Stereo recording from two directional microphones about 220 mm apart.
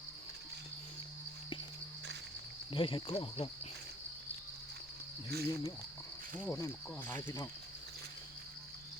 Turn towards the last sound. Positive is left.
turn(degrees=10)  # may be behind; listen again after turning